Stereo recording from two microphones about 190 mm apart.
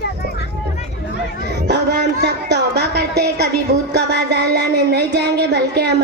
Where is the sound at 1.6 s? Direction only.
60° right (ahead or behind).